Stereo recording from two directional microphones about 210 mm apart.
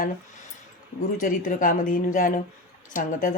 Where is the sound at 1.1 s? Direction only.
40° left (ahead or behind).